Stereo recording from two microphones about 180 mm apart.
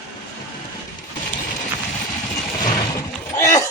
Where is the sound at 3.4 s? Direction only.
15° left (ahead or behind).